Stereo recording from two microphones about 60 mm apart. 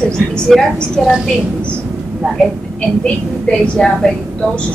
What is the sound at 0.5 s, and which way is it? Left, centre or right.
Speech, centre.